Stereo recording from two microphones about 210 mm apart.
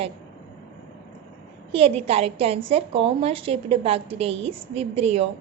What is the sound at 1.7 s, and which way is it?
A woman's voice, 25° right (ahead or behind).